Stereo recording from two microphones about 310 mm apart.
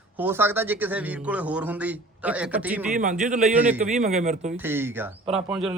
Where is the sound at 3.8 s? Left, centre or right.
Right.